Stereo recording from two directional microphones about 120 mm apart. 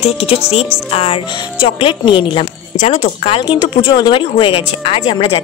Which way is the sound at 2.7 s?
65° left (ahead or behind).